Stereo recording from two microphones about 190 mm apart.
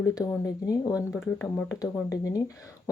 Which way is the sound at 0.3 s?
20° left (ahead or behind).